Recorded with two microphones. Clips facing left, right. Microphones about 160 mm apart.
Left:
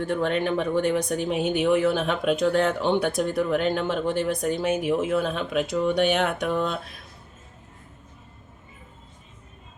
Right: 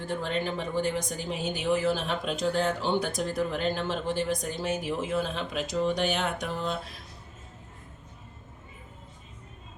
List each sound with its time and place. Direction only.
0.0 s speech: 60° left (ahead or behind)